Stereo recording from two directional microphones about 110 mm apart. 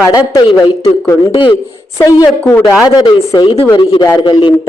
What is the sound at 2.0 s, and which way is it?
Speech, 30° left (ahead or behind).